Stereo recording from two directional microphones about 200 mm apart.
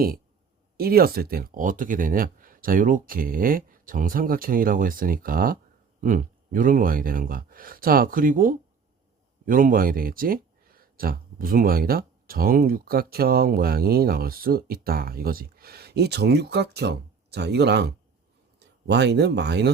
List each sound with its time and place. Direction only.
0.8 s speech: 50° right (ahead or behind)